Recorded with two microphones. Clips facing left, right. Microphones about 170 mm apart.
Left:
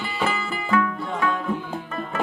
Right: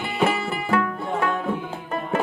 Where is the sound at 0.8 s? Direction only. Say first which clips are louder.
Left 2 dB; 45° right (ahead or behind).